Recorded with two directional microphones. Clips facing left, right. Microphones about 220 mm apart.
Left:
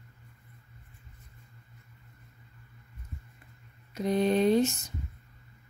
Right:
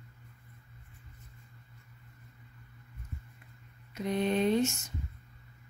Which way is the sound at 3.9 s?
35° left (ahead or behind).